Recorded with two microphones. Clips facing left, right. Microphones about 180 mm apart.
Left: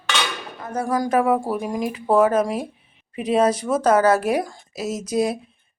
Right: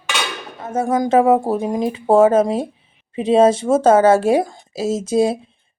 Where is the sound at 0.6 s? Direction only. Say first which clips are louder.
Right 4 dB; 25° right (ahead or behind).